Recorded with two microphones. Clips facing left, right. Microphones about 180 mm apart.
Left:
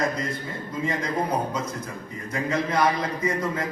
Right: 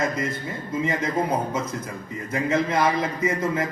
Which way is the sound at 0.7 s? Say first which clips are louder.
Right 3 dB; 20° right (ahead or behind).